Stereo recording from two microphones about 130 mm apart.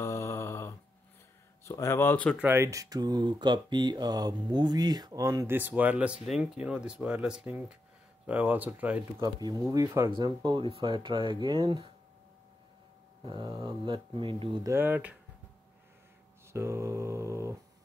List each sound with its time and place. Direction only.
0.0 s mantra: 20° left (ahead or behind)
1.6 s speech: 20° left (ahead or behind)
2.3 s speech: 15° right (ahead or behind)
5.5 s speech: 15° right (ahead or behind)
9.2 s speech: 30° right (ahead or behind)
10.1 s speech: 35° right (ahead or behind)
13.2 s speech: 40° right (ahead or behind)
14.6 s speech: 20° right (ahead or behind)
16.5 s mantra: 20° right (ahead or behind)